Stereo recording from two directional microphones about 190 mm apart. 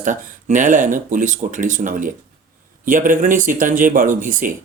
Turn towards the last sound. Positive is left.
turn(degrees=-45)  # may be behind; listen again after turning